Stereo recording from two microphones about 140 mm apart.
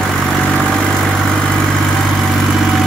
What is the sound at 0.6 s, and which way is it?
Vehicle, 5° left (ahead or behind).